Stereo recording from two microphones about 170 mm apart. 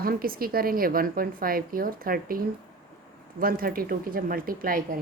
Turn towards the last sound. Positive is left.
turn(degrees=-55)  # may be behind; listen again after turning